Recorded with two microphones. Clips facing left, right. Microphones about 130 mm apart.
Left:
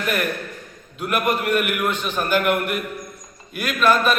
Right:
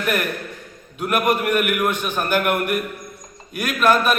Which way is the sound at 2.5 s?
50° right (ahead or behind).